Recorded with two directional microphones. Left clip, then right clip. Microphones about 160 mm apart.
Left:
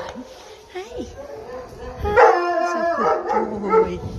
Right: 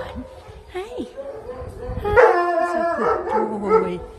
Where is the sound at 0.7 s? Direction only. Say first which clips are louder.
Right 2 dB; 30° right (ahead or behind).